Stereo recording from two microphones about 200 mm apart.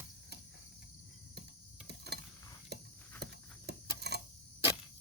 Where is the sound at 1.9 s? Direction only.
55° right (ahead or behind).